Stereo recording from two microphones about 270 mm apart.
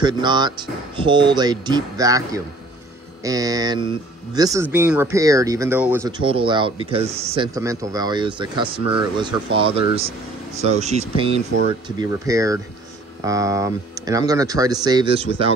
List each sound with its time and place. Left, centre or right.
0.0 s speech: centre